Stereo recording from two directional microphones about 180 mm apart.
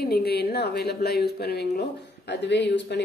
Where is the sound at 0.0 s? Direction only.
60° left (ahead or behind).